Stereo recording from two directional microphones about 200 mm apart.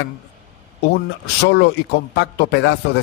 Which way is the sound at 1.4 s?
55° left (ahead or behind).